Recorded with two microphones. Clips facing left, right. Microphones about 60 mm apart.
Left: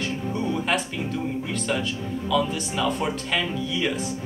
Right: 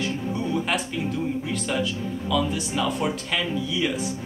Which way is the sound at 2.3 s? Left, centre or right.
Centre.